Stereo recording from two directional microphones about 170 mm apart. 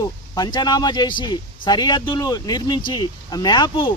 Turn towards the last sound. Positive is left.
turn(degrees=25)  # may be behind; listen again after turning